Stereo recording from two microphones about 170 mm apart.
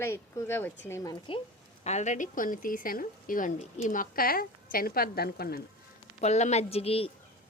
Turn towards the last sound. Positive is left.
turn(degrees=35)  # may be behind; listen again after turning